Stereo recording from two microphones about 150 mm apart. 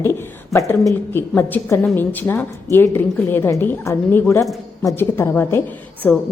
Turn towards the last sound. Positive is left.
turn(degrees=15)  # may be behind; listen again after turning